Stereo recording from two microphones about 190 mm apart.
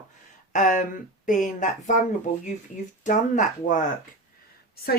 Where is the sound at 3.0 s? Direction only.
40° left (ahead or behind).